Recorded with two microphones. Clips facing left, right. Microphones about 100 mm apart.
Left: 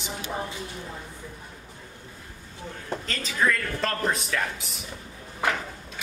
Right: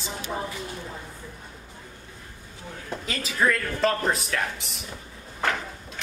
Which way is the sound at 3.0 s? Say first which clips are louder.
Right 2 dB; 5° right (ahead or behind).